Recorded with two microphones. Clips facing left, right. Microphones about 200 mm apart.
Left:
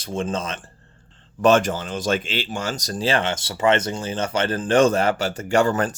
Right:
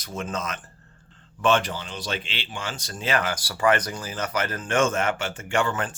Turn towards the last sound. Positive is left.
turn(degrees=40)  # may be behind; listen again after turning